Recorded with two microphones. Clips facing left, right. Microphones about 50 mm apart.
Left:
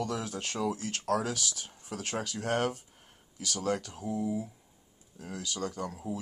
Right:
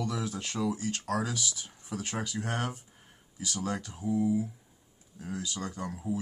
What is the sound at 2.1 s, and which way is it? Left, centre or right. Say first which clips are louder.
Speech: left 4 dB; right.